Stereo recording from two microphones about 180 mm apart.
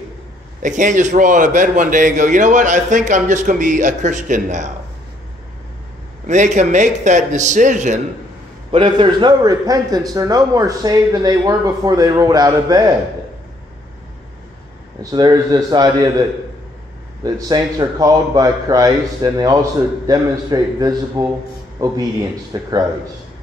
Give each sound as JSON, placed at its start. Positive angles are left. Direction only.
{"t": 0.6, "sound": "a man's voice", "side_deg": -45}
{"t": 6.2, "sound": "a man's voice", "side_deg": -40}
{"t": 8.7, "sound": "a man's voice", "side_deg": -30}
{"t": 15.0, "sound": "a man's voice", "side_deg": -20}
{"t": 17.2, "sound": "a man's voice", "side_deg": -20}